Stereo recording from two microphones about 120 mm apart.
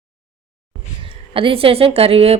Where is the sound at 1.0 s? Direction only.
45° right (ahead or behind).